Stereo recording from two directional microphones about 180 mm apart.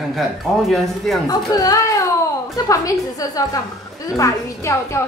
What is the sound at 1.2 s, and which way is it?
A woman's voice, 20° left (ahead or behind).